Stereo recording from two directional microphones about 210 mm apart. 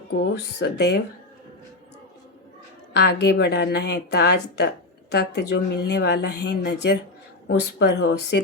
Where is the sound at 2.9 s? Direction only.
55° left (ahead or behind).